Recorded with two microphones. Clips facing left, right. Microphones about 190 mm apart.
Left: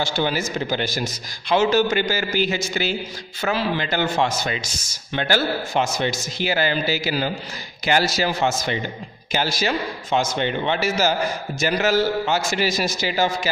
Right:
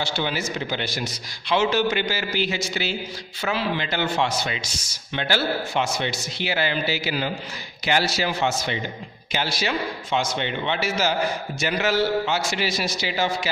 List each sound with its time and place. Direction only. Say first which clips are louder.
0.0 s speech: left 4 dB; 45° left (ahead or behind)